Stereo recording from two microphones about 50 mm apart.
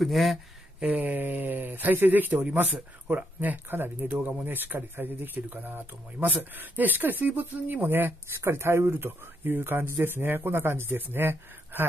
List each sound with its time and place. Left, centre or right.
0.0 s speech: centre
0.8 s speech: right
8.4 s speech: right